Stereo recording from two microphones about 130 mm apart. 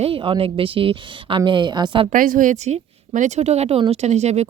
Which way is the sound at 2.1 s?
90° right.